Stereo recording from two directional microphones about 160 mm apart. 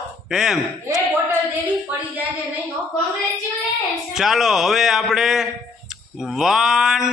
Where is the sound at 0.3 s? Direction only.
5° right (ahead or behind).